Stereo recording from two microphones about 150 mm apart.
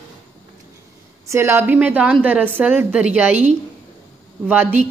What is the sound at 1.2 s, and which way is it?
Speech, 15° right (ahead or behind).